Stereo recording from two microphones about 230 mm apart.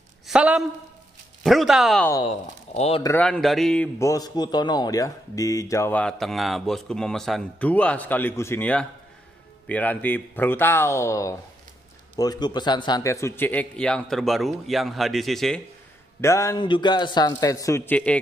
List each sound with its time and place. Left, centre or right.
0.3 s a man's voice: centre
2.2 s speech: left
3.0 s a man's voice: centre
16.2 s a man's voice: centre